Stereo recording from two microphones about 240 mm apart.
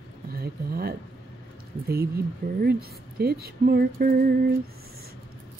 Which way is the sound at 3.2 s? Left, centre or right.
Right.